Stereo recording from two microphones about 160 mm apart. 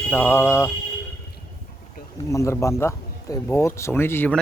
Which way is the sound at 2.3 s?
20° left (ahead or behind).